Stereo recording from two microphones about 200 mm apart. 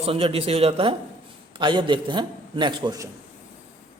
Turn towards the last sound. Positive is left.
turn(degrees=-20)  # may be behind; listen again after turning